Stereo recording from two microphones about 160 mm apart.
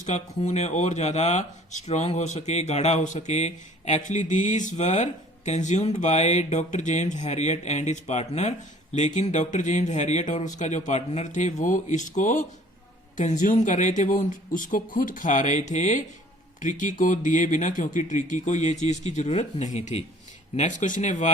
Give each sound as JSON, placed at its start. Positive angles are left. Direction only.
{"t": 0.0, "sound": "speech", "side_deg": 50}